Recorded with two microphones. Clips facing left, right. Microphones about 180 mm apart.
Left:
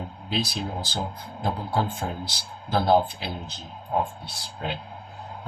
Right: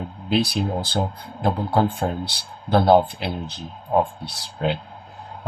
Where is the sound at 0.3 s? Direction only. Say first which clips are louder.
Right 8 dB; 60° right (ahead or behind).